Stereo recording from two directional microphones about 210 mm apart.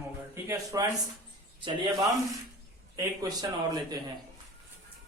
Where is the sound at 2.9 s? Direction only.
20° right (ahead or behind).